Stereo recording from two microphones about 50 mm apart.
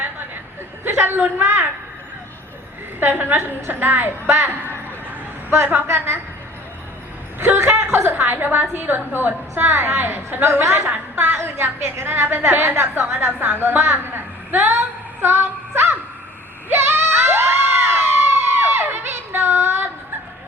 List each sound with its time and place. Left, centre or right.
0.9 s a woman's voice: right
3.0 s a woman's voice: right
7.3 s chuckle: right
8.1 s a woman's voice: right
16.6 s crowd: right